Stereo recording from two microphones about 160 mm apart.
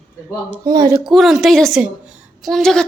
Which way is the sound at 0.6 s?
25° right (ahead or behind).